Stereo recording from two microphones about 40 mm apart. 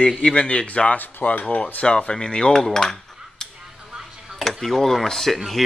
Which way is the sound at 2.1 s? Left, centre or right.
Left.